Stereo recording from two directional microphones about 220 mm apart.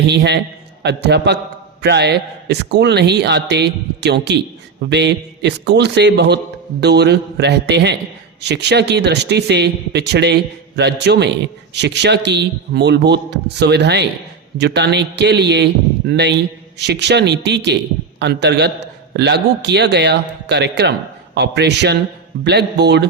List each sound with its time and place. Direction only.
0.1 s a man's voice: 50° right (ahead or behind)